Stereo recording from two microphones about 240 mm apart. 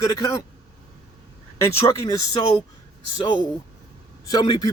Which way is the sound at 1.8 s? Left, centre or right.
Centre.